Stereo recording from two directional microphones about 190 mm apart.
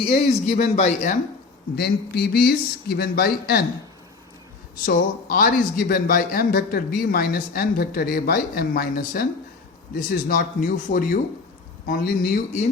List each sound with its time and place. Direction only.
0.2 s speech: 35° left (ahead or behind)
1.7 s speech: 55° left (ahead or behind)
4.9 s a man's voice: 50° left (ahead or behind)